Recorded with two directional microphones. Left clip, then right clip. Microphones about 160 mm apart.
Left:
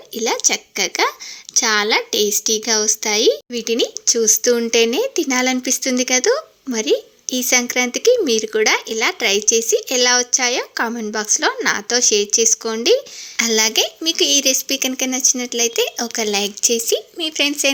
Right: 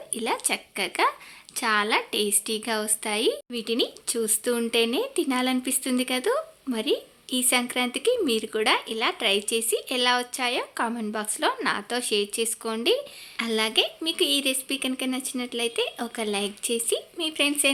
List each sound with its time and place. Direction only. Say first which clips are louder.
0.2 s speech: left 9 dB; 25° left (ahead or behind)